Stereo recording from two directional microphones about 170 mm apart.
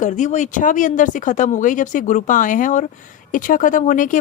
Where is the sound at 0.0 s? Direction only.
45° left (ahead or behind).